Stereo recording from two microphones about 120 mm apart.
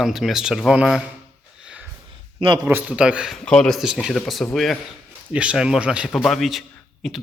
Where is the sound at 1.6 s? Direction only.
10° right (ahead or behind).